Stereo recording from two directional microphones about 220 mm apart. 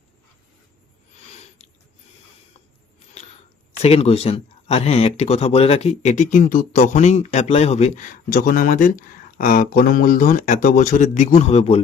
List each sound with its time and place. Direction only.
3.8 s speech: 30° left (ahead or behind)